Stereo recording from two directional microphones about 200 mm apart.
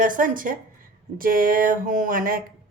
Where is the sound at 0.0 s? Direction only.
45° right (ahead or behind).